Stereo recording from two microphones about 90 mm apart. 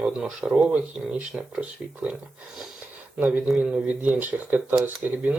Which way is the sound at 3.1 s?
20° right (ahead or behind).